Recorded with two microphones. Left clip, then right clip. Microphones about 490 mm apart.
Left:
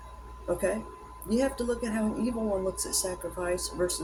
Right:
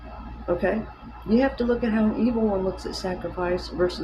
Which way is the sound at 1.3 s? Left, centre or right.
Left.